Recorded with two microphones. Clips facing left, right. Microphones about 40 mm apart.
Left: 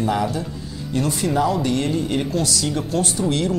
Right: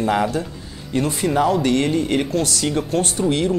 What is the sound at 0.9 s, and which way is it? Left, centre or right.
Speech, right.